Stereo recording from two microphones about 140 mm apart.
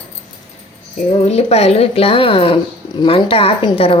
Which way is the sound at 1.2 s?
50° left (ahead or behind).